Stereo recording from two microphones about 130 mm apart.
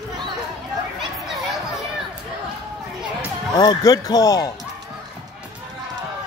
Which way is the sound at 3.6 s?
30° left (ahead or behind).